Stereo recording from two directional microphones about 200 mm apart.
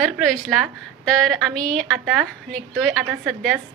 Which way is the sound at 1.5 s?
5° left (ahead or behind).